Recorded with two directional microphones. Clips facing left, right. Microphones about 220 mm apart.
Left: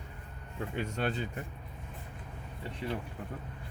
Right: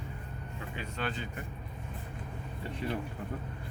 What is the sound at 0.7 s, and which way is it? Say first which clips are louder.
Speech: left 4 dB; 45° left (ahead or behind).